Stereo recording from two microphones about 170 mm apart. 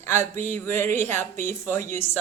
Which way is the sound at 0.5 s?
15° left (ahead or behind).